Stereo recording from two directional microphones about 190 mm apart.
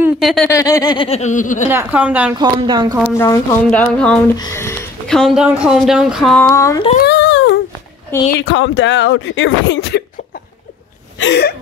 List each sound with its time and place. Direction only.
0.2 s speech: centre (ahead or behind)
0.5 s speech: 15° left (ahead or behind); by 1.7 s 40° left (ahead or behind)
1.7 s a woman's voice: 10° right (ahead or behind)
2.3 s speech: 25° right (ahead or behind)
3.2 s speech: 10° left (ahead or behind)
5.0 s speech: centre (ahead or behind)
6.4 s speech: 15° left (ahead or behind)
7.1 s a sound: 75° left (ahead or behind)
8.4 s speech: 70° left (ahead or behind)
11.1 s speech: 65° left (ahead or behind)